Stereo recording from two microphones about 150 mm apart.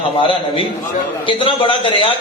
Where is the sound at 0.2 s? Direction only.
35° left (ahead or behind).